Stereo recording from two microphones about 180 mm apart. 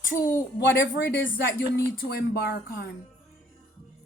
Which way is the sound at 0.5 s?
60° left (ahead or behind).